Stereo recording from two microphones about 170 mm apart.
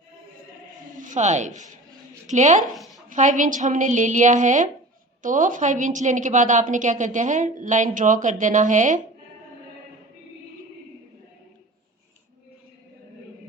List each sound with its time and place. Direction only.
1.0 s a woman's voice: 45° right (ahead or behind)
2.7 s a sound: centre (ahead or behind)
3.1 s a woman's voice: 50° right (ahead or behind)